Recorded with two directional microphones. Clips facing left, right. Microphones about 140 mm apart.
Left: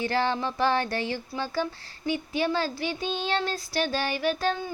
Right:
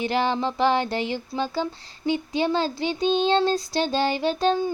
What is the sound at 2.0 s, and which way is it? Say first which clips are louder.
Child singing: right 4 dB; 20° right (ahead or behind).